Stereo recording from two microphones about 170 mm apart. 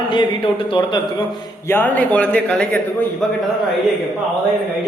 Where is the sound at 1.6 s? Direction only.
10° left (ahead or behind).